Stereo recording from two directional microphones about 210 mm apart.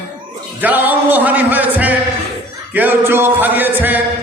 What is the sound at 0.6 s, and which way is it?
Music, 10° right (ahead or behind).